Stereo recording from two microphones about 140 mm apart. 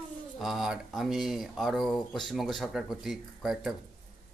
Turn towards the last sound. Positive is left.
turn(degrees=0)  # may be behind; listen again after turning